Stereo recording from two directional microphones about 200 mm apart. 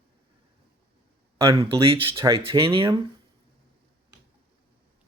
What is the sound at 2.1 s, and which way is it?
Speech, 20° right (ahead or behind).